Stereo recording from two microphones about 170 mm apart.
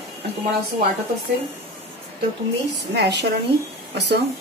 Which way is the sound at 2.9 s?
80° right.